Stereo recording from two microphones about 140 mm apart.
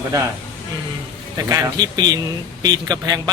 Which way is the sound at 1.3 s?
25° right (ahead or behind).